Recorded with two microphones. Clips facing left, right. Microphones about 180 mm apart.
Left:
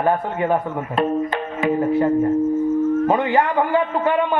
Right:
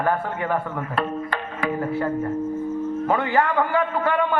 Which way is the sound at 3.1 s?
15° left (ahead or behind).